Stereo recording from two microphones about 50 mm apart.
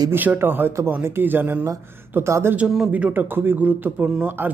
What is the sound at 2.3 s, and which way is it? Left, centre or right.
Speech, right.